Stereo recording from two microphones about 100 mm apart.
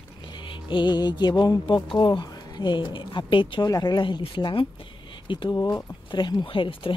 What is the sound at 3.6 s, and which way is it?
Speech, 40° left (ahead or behind).